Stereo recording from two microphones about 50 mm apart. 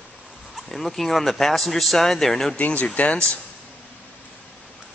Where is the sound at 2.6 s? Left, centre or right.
Left.